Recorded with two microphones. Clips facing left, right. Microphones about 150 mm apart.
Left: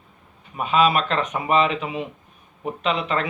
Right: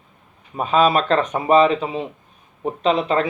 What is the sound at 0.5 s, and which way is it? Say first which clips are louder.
Speech: right 3 dB; 35° right (ahead or behind).